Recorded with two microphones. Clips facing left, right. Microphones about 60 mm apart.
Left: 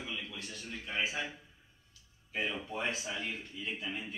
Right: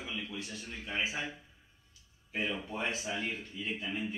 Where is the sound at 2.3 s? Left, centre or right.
Centre.